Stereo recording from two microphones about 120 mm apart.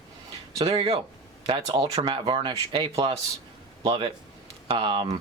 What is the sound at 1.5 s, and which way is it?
A man's voice, 50° right (ahead or behind).